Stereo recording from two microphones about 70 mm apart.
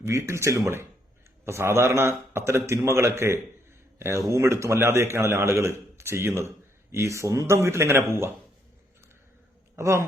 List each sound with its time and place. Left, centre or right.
0.0 s a man's voice: right
9.7 s speech: right